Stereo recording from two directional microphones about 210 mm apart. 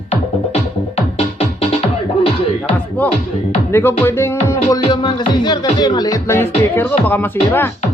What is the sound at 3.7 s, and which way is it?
Music, 10° left (ahead or behind).